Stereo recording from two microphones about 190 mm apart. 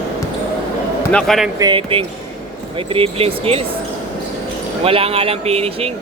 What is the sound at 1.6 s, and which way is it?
Speech, 25° right (ahead or behind).